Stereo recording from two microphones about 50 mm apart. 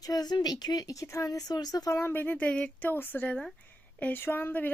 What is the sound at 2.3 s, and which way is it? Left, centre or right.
Speech, left.